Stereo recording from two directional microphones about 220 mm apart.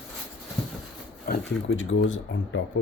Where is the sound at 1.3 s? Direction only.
40° left (ahead or behind).